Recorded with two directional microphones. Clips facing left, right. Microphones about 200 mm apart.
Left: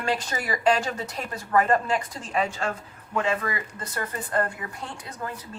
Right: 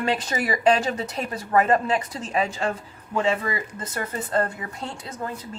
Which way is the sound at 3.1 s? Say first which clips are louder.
Right 3 dB; 25° right (ahead or behind).